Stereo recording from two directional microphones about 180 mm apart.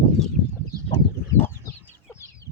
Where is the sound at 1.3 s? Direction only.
10° left (ahead or behind).